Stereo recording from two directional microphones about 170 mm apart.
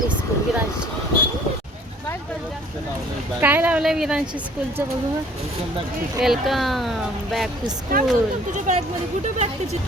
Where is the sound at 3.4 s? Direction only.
10° right (ahead or behind).